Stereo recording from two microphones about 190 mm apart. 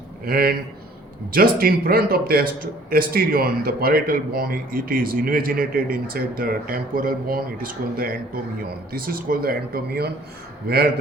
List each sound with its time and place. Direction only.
0.3 s a man's voice: 50° right (ahead or behind)